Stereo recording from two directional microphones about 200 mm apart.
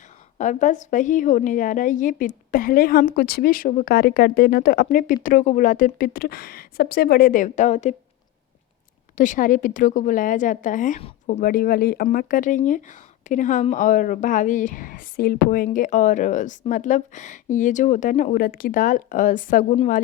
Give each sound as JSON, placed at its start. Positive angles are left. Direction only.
{"t": 0.3, "sound": "a woman's voice", "side_deg": 40}
{"t": 9.1, "sound": "a woman's voice", "side_deg": 40}
{"t": 19.7, "sound": "speech", "side_deg": 30}